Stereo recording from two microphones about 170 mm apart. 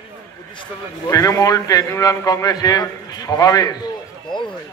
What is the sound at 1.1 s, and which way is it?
A man's voice, 20° left (ahead or behind).